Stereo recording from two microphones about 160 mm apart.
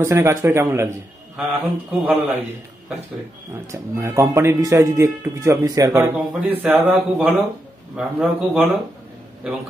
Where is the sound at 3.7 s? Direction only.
20° right (ahead or behind).